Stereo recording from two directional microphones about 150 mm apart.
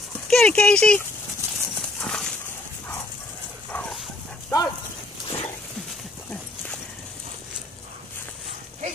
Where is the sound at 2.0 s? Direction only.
5° left (ahead or behind).